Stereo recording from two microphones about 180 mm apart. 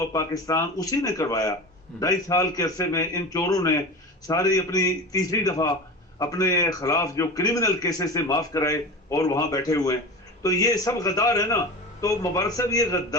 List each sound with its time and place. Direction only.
0.1 s a man's voice: 20° left (ahead or behind)